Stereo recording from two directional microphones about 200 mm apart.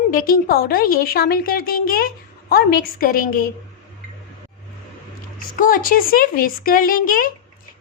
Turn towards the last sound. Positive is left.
turn(degrees=45)  # may be behind; listen again after turning